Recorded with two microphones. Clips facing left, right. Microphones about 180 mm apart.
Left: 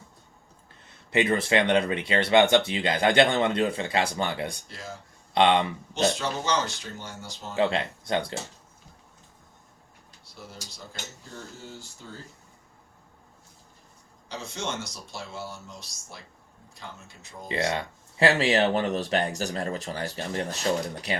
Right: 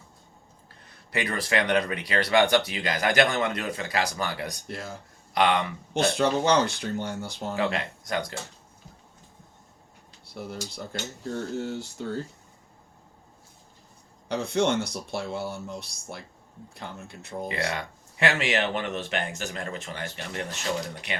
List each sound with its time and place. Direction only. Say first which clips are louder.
0.9 s speech: left 7 dB; 25° left (ahead or behind)
5.9 s speech: right 4 dB; 60° right (ahead or behind)
7.5 s speech: left 4 dB; 25° left (ahead or behind)
10.4 s speech: right 8 dB; 60° right (ahead or behind)
11.5 s speech: right 12 dB; 70° right (ahead or behind)
14.3 s speech: right 10 dB; 60° right (ahead or behind)
17.5 s speech: left 6 dB; 30° left (ahead or behind)